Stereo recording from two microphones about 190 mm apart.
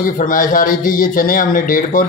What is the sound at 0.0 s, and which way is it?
Speech, 45° left (ahead or behind).